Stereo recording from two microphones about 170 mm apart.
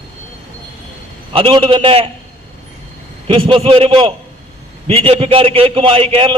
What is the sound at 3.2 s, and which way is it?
A man's voice, 30° right (ahead or behind).